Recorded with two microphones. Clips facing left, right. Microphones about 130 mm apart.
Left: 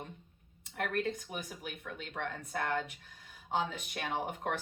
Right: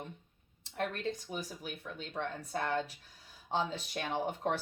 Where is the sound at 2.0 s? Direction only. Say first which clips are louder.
Right 2 dB; 30° right (ahead or behind).